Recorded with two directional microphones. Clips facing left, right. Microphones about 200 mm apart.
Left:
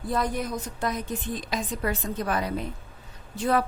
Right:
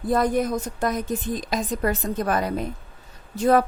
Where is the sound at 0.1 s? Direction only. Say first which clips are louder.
Right 7 dB; 50° right (ahead or behind).